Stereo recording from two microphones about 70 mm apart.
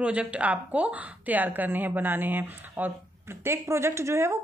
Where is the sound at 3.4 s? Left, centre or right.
Right.